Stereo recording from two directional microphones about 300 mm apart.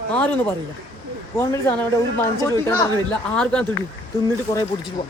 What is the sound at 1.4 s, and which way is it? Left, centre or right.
Speech, centre.